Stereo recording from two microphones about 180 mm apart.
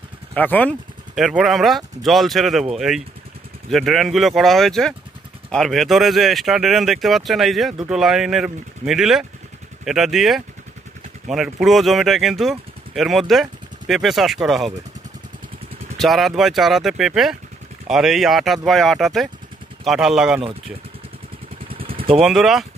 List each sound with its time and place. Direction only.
0.3 s speech: 10° left (ahead or behind)
1.1 s speech: centre (ahead or behind)
16.0 s speech: centre (ahead or behind)
21.7 s vehicle: 30° right (ahead or behind)
22.1 s speech: centre (ahead or behind)